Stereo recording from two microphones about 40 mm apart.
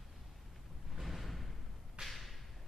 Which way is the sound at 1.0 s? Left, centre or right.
Centre.